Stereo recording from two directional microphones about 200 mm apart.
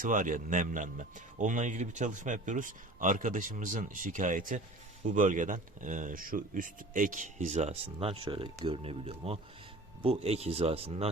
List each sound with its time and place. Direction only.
0.0 s speech: 40° right (ahead or behind)